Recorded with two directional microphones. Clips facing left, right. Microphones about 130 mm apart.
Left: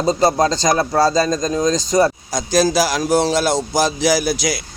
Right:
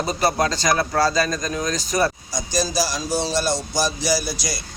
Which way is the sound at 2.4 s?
90° left.